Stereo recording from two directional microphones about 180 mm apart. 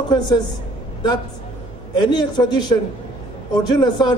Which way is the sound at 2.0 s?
25° left (ahead or behind).